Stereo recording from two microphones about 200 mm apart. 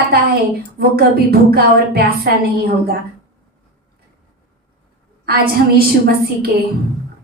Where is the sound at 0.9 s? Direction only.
50° right (ahead or behind).